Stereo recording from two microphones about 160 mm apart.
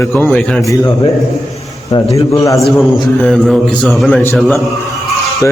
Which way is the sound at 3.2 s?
5° left (ahead or behind).